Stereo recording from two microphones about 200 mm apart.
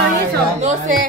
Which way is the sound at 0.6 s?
35° right (ahead or behind).